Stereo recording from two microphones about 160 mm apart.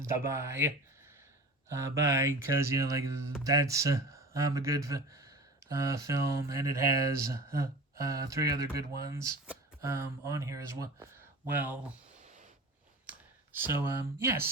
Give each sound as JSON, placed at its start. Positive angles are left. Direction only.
{"t": 0.0, "sound": "speech", "side_deg": -15}
{"t": 1.7, "sound": "speech", "side_deg": -20}
{"t": 13.1, "sound": "speech", "side_deg": -15}